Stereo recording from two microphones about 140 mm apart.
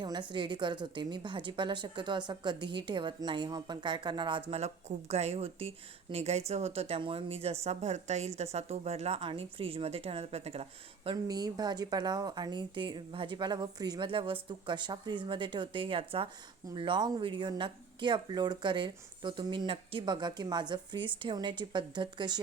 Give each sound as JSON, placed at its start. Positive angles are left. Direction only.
{"t": 0.0, "sound": "speech", "side_deg": -30}
{"t": 4.5, "sound": "speech", "side_deg": -50}
{"t": 11.3, "sound": "speech", "side_deg": -30}